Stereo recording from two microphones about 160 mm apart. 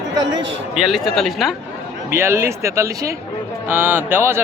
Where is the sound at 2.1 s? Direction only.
15° right (ahead or behind).